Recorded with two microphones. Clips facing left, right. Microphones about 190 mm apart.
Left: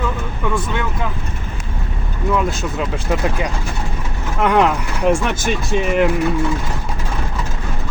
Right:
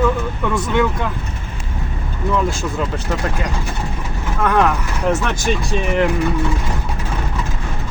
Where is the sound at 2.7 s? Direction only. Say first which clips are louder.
Left 1 dB; 10° left (ahead or behind).